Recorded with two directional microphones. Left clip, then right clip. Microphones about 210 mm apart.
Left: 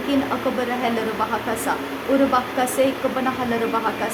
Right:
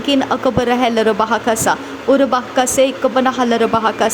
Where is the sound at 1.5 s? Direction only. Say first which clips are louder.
Right 8 dB; 35° right (ahead or behind).